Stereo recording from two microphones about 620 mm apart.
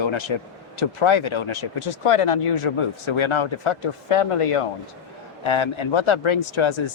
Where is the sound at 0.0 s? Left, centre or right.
Left.